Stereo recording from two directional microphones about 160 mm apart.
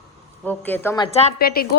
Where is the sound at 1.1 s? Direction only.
40° left (ahead or behind).